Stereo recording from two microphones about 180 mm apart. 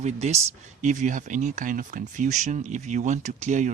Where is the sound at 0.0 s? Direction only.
40° right (ahead or behind).